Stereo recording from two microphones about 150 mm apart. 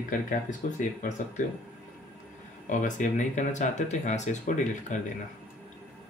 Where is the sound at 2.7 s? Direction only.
55° left (ahead or behind).